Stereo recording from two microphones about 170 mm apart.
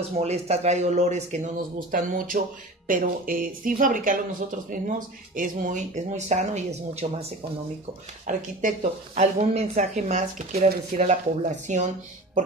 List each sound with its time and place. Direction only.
0.2 s speech: 40° right (ahead or behind)
8.3 s speech: 50° right (ahead or behind)